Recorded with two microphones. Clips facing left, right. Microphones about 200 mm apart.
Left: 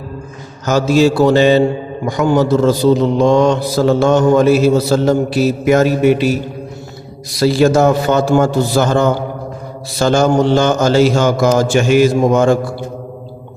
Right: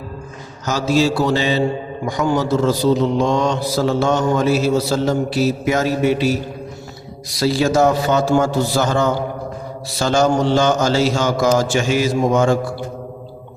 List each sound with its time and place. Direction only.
0.6 s mantra: 55° left (ahead or behind)
7.3 s mantra: 55° left (ahead or behind)